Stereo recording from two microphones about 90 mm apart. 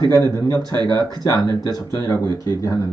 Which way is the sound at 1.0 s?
50° left (ahead or behind).